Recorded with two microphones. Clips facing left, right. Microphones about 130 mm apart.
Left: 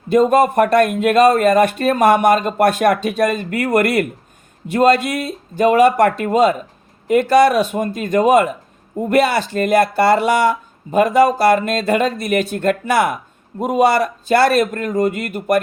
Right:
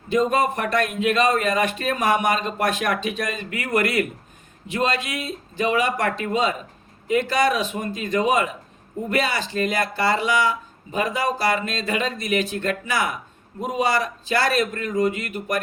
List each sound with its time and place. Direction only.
0.1 s speech: 50° left (ahead or behind)
4.7 s a man's voice: 50° left (ahead or behind)
14.6 s speech: 45° left (ahead or behind)